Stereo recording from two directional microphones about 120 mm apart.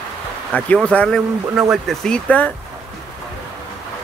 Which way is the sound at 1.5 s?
5° right (ahead or behind).